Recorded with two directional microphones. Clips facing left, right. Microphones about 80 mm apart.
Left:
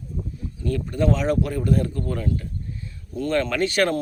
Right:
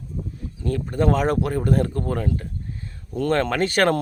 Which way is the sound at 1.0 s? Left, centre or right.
Right.